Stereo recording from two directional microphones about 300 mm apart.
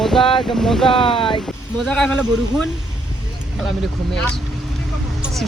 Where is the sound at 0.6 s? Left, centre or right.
Centre.